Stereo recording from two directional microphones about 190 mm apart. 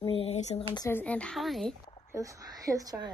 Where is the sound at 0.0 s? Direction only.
30° left (ahead or behind).